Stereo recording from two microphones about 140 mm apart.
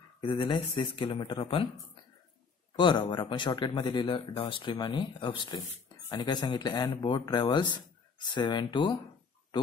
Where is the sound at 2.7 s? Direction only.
35° left (ahead or behind).